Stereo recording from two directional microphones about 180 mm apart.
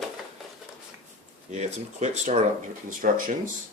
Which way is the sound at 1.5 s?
40° right (ahead or behind).